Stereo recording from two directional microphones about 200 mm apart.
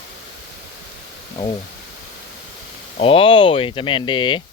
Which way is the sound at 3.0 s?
25° left (ahead or behind).